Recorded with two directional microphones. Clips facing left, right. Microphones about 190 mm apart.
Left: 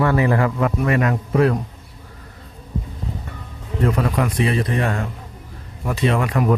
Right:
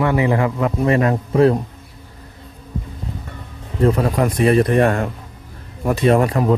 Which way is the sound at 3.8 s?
35° right (ahead or behind).